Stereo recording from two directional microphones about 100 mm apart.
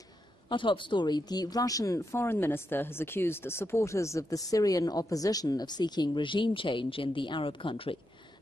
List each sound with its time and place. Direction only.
0.5 s speech: 55° left (ahead or behind)